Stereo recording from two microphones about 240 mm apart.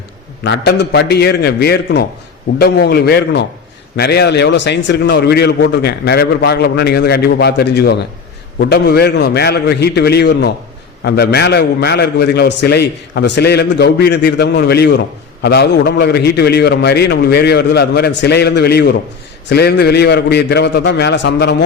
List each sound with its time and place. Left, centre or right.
0.4 s a man's voice: left